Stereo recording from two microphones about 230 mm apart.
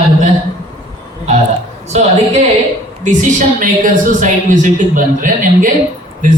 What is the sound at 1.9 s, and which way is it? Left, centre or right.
A woman's voice, right.